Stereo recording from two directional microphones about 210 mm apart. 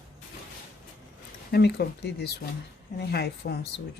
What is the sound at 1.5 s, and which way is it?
Speech, 50° left (ahead or behind).